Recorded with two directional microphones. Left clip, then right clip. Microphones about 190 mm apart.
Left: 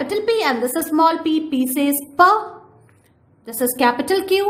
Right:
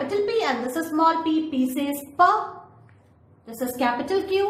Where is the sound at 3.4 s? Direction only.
65° left (ahead or behind).